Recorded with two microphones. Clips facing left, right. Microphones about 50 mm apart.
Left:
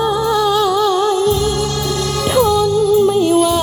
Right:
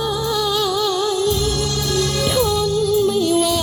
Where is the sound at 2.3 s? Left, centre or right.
Left.